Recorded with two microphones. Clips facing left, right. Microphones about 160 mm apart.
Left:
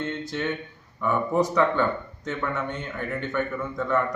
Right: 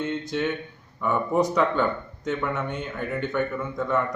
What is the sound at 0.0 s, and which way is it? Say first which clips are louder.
Speech: right 2 dB; 20° right (ahead or behind).